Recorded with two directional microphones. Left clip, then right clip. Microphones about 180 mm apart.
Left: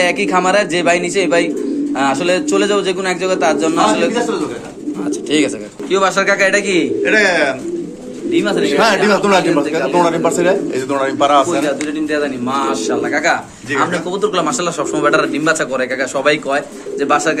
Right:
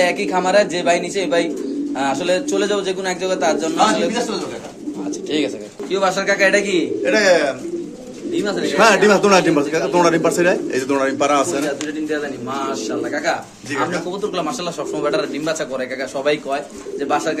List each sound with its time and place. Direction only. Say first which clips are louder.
0.0 s a man's voice: left 4 dB; centre (ahead or behind)
5.3 s a man's voice: left 5 dB; centre (ahead or behind)
7.0 s a man's voice: left 1 dB; 30° right (ahead or behind)
8.6 s a man's voice: right 2 dB; 50° right (ahead or behind)
12.7 s a man's voice: left 6 dB; 5° left (ahead or behind)